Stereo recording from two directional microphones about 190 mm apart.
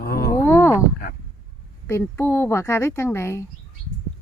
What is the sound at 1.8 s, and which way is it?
A woman's voice, 10° left (ahead or behind).